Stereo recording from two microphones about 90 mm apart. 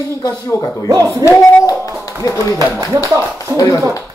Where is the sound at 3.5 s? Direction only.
35° left (ahead or behind).